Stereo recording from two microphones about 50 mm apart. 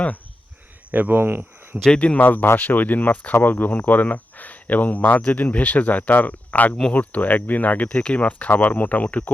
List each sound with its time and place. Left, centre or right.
0.9 s speech: right
2.0 s speech: left
2.2 s speech: left